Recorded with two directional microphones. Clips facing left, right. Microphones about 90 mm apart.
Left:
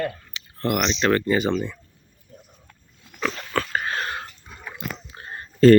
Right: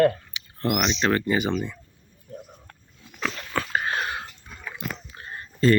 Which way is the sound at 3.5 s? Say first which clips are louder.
Right 1 dB; 15° right (ahead or behind).